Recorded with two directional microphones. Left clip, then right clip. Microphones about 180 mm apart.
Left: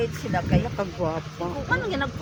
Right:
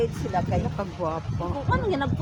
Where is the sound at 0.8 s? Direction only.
45° left (ahead or behind).